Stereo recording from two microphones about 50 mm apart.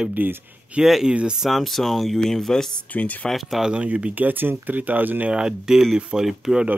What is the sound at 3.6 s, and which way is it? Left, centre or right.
Speech, centre.